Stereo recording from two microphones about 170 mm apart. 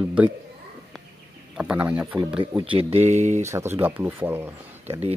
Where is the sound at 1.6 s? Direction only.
5° right (ahead or behind).